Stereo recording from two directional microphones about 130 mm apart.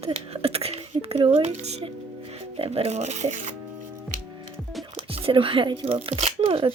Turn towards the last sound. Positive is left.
turn(degrees=-45)  # may be behind; listen again after turning